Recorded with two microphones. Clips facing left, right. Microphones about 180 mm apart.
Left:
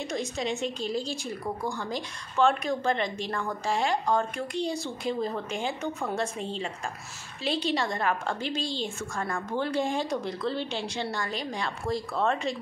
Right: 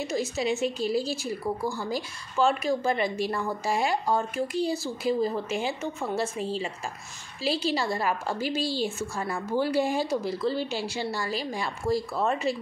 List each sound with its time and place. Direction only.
0.0 s a woman's voice: 5° right (ahead or behind)